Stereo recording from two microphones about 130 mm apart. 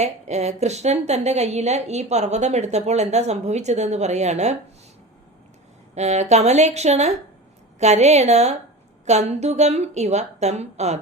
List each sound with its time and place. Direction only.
0.0 s a woman's voice: 60° right (ahead or behind)
5.9 s a woman's voice: 60° right (ahead or behind)